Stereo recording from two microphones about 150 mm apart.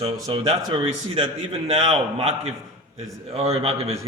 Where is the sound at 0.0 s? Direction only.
40° right (ahead or behind).